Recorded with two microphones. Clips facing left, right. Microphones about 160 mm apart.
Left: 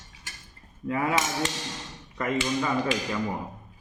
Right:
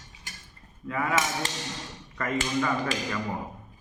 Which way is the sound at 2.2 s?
20° left (ahead or behind).